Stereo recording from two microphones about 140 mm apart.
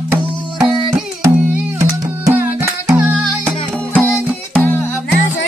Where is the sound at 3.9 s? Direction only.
15° left (ahead or behind).